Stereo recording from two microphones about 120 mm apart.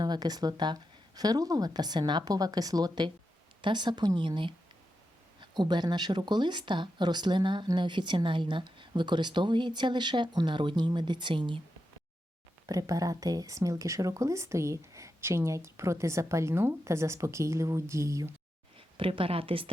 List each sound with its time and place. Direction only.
0.0 s speech: 35° right (ahead or behind)
12.6 s speech: 30° right (ahead or behind)
18.8 s speech: 45° right (ahead or behind)